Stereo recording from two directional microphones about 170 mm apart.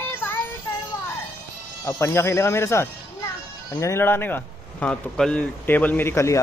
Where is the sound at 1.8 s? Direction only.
15° left (ahead or behind).